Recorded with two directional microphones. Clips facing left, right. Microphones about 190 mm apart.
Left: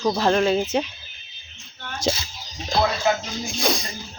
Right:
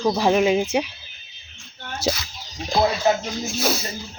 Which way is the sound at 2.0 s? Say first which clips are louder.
Even; 10° right (ahead or behind).